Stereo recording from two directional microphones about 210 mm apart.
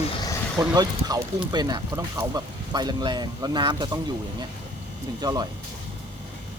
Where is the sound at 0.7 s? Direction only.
20° right (ahead or behind).